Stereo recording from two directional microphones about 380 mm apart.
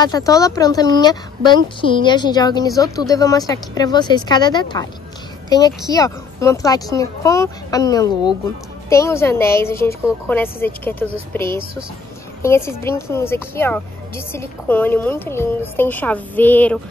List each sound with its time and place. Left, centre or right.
0.0 s speech: centre
5.9 s speech: centre